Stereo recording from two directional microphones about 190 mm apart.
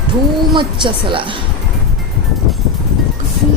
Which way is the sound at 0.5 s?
25° right (ahead or behind).